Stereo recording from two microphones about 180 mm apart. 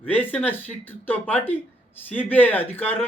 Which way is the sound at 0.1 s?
10° left (ahead or behind).